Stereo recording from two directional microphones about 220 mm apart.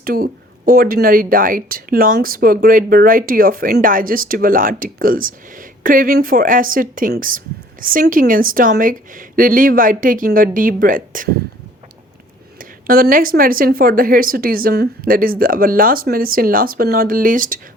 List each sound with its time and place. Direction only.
0.0 s speech: 40° right (ahead or behind)
12.5 s speech: 40° right (ahead or behind)